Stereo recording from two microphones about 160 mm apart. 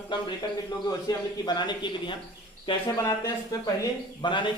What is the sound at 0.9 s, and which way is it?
A man's voice, 25° left (ahead or behind).